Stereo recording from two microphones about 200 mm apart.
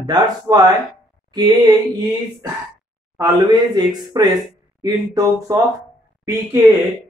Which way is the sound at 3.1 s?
20° right (ahead or behind).